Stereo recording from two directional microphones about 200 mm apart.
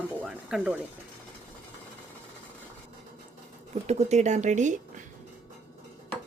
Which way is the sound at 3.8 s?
35° right (ahead or behind).